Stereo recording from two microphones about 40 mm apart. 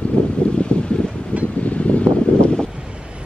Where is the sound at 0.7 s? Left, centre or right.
Left.